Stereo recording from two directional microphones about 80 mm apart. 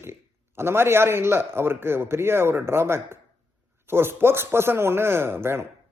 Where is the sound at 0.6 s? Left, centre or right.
Right.